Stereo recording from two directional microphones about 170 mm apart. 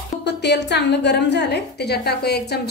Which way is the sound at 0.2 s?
80° left.